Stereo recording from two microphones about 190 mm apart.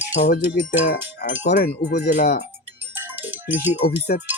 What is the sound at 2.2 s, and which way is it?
Speech, 40° left (ahead or behind).